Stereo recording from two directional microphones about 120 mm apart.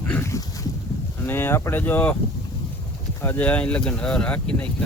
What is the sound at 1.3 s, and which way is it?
Speech, 20° left (ahead or behind).